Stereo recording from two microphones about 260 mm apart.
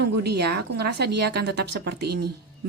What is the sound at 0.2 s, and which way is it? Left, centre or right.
A woman's voice, right.